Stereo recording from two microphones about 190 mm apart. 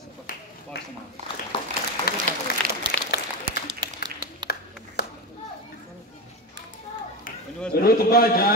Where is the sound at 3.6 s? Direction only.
25° right (ahead or behind).